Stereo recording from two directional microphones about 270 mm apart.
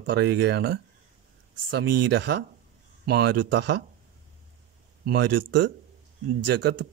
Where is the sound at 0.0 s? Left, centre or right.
Right.